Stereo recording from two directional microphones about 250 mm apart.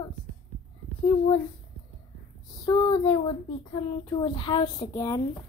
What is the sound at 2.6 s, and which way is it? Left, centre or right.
A woman's voice, centre.